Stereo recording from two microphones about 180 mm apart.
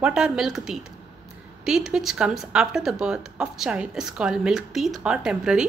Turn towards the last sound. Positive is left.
turn(degrees=-5)  # may be behind; listen again after turning